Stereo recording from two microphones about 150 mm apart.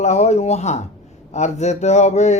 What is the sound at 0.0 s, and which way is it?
Speech, 50° left (ahead or behind).